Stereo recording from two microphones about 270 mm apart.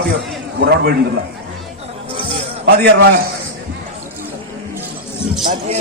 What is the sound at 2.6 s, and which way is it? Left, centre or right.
Speech, right.